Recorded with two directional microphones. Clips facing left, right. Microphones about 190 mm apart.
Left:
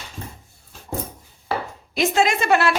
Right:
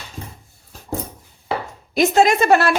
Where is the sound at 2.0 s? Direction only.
40° right (ahead or behind).